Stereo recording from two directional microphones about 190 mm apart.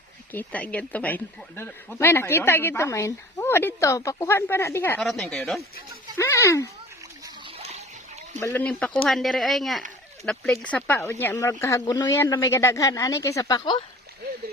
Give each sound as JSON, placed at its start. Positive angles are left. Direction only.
{"t": 0.3, "sound": "a woman's voice", "side_deg": 5}
{"t": 6.1, "sound": "speech", "side_deg": 15}
{"t": 7.4, "sound": "a sound", "side_deg": -30}
{"t": 8.4, "sound": "a woman's voice", "side_deg": 10}